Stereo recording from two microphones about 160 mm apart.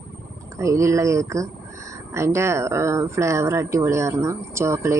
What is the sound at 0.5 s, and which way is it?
Speech, 20° right (ahead or behind).